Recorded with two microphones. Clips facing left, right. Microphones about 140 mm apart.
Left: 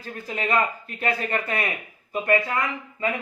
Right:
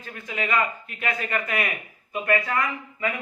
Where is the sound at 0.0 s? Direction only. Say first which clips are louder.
Left 1 dB; 35° left (ahead or behind).